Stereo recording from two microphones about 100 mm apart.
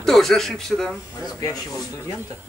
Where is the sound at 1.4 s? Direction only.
40° left (ahead or behind).